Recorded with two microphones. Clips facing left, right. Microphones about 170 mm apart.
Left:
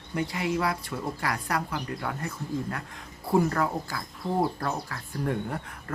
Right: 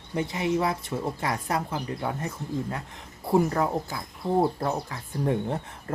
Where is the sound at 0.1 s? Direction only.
20° right (ahead or behind).